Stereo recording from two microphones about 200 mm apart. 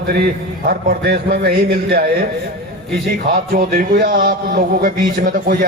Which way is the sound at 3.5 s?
45° right (ahead or behind).